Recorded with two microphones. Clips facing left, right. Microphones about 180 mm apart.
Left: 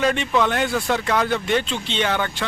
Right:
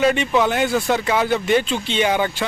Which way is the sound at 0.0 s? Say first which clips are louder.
Right 3 dB; 5° right (ahead or behind).